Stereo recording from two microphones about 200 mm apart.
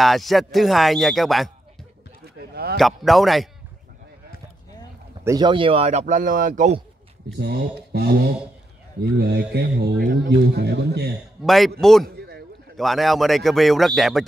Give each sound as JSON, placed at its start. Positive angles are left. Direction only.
{"t": 0.0, "sound": "a man's voice", "side_deg": 0}
{"t": 2.2, "sound": "a sound", "side_deg": -50}
{"t": 2.8, "sound": "a man's voice", "side_deg": 0}
{"t": 5.2, "sound": "speech", "side_deg": -20}
{"t": 7.2, "sound": "a man's voice", "side_deg": -55}
{"t": 9.2, "sound": "a man's voice", "side_deg": -55}
{"t": 11.4, "sound": "a man's voice", "side_deg": 0}
{"t": 12.2, "sound": "a sound", "side_deg": -55}
{"t": 12.7, "sound": "a man's voice", "side_deg": 0}